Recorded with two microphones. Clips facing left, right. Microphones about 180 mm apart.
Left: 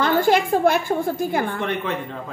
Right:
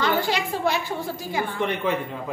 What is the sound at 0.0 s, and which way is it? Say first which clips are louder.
A woman's voice: left 6 dB; 50° left (ahead or behind).